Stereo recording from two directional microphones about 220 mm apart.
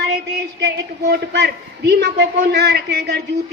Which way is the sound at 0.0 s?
50° right (ahead or behind).